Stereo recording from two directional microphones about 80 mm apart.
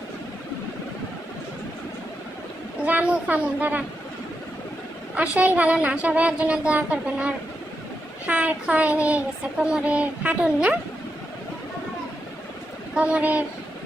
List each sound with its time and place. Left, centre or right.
2.8 s a woman's voice: centre
5.1 s child singing: centre
12.9 s child singing: centre